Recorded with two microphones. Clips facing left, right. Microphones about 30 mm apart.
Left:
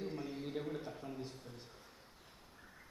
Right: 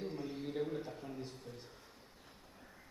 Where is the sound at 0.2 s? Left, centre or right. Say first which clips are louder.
Right 2 dB; centre.